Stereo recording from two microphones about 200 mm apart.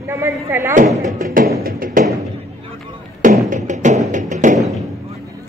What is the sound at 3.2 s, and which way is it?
Music, 40° right (ahead or behind).